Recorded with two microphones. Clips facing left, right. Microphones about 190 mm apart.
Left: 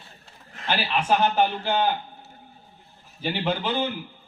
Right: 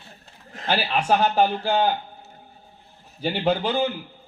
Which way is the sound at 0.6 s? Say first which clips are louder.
Right 2 dB; 45° right (ahead or behind).